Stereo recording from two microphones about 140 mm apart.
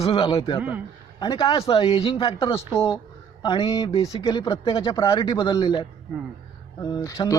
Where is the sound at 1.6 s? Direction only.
40° left (ahead or behind).